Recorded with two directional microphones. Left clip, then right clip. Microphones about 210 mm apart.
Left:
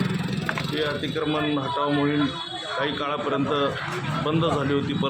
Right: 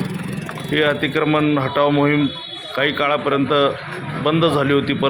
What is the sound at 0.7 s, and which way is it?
A man's voice, 20° right (ahead or behind).